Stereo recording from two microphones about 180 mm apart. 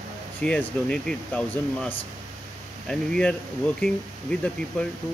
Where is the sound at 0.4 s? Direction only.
5° left (ahead or behind).